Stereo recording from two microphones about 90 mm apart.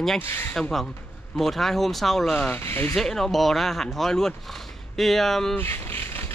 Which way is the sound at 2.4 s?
20° left (ahead or behind).